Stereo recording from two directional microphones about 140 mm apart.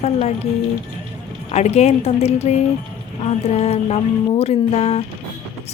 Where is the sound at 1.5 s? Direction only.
50° left (ahead or behind).